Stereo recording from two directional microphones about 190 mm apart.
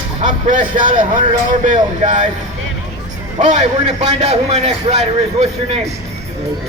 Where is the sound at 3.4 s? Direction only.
40° right (ahead or behind).